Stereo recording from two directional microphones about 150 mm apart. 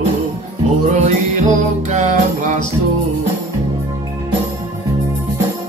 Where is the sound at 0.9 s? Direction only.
50° right (ahead or behind).